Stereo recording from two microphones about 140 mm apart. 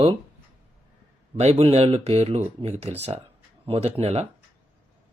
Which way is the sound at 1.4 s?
45° right (ahead or behind).